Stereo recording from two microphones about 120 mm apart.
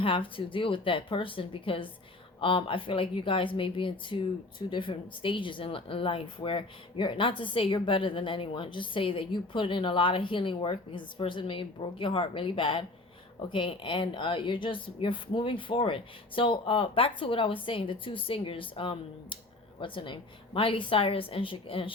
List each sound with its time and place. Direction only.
0.0 s speech: 45° left (ahead or behind)